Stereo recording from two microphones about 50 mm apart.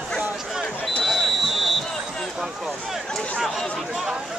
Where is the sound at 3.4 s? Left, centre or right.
Centre.